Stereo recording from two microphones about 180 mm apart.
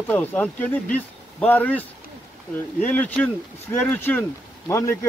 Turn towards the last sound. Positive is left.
turn(degrees=15)  # may be behind; listen again after turning